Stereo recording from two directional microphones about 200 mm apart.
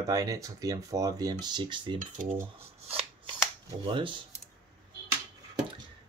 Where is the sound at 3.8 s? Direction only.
25° right (ahead or behind).